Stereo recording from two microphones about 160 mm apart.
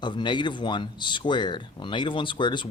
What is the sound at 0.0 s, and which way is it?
Speech, 30° left (ahead or behind).